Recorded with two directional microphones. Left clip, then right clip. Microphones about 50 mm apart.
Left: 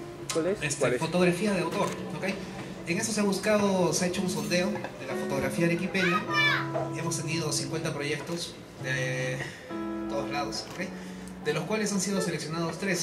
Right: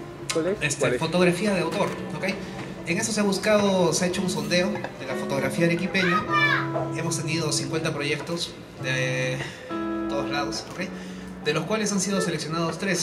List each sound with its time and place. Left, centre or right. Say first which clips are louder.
0.6 s a man's voice: right 3 dB; right
2.9 s a man's voice: right 4 dB; right
6.3 s a child's voice: right 4 dB; left
6.9 s a man's voice: right 4 dB; right